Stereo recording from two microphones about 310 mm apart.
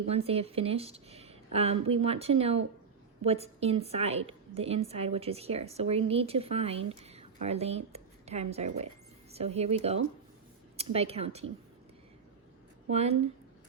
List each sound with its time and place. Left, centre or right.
0.1 s a woman's voice: centre
12.9 s a woman's voice: centre